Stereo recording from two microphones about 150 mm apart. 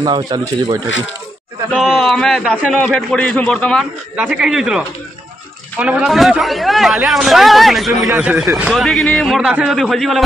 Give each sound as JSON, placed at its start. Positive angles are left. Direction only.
{"t": 0.0, "sound": "speech", "side_deg": -30}
{"t": 1.7, "sound": "a man's voice", "side_deg": -5}